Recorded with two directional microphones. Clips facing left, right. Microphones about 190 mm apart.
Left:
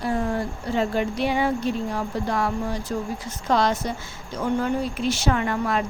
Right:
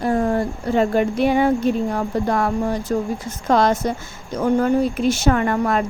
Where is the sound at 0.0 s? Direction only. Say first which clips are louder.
Right 6 dB; 50° right (ahead or behind).